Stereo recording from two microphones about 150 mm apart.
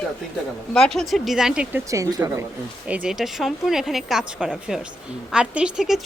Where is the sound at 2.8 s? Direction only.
10° right (ahead or behind).